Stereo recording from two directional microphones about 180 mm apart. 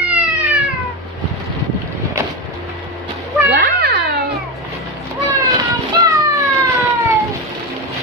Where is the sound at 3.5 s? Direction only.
60° right (ahead or behind).